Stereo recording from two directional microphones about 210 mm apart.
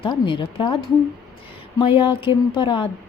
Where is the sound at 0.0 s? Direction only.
25° left (ahead or behind).